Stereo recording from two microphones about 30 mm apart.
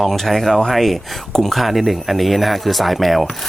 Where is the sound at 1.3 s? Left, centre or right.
Centre.